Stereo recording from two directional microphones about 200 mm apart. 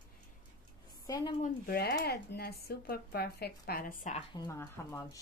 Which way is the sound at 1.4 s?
50° left (ahead or behind).